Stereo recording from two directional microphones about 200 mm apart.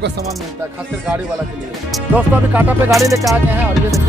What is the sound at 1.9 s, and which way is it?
Speech, 10° right (ahead or behind).